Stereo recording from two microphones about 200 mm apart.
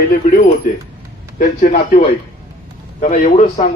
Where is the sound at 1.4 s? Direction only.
45° left (ahead or behind).